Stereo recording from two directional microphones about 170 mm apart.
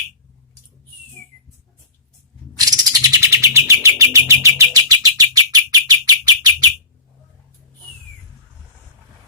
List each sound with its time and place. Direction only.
2.6 s bird: 20° right (ahead or behind)